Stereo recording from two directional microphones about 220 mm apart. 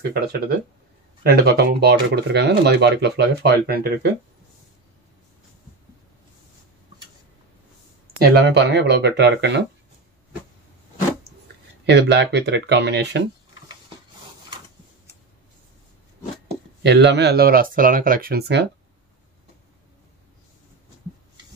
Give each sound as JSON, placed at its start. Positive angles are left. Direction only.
{"t": 0.1, "sound": "speech", "side_deg": -45}
{"t": 8.2, "sound": "speech", "side_deg": -45}
{"t": 11.8, "sound": "speech", "side_deg": -50}
{"t": 16.8, "sound": "speech", "side_deg": -50}